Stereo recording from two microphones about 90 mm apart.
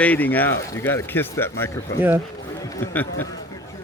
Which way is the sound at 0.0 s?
20° left (ahead or behind).